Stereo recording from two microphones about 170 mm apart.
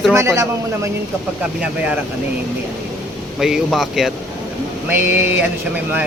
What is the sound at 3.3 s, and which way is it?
Speech, centre (ahead or behind).